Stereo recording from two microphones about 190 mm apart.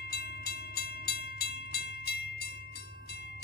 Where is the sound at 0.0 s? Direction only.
55° left (ahead or behind).